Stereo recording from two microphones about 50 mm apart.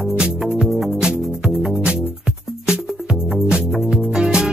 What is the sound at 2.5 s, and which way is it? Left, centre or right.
Music, centre.